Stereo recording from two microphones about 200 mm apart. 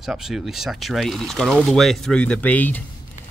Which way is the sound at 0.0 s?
Centre (ahead or behind).